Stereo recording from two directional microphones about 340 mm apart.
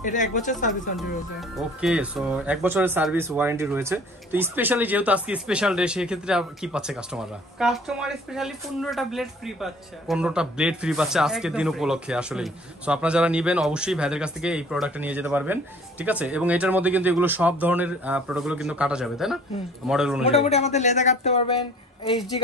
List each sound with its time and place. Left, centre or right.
0.0 s speech: left
1.6 s speech: centre
20.2 s speech: centre